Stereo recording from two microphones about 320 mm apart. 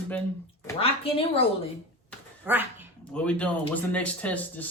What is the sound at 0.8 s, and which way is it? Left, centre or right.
Speech, centre.